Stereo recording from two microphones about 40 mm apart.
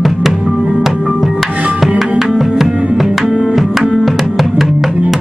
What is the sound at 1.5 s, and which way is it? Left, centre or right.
Music, right.